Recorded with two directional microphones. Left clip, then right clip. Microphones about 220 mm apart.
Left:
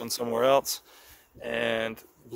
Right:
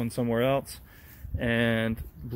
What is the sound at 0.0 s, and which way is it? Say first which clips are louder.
Speech: left 2 dB; 25° left (ahead or behind).